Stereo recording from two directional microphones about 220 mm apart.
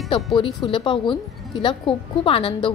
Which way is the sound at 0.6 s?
20° left (ahead or behind).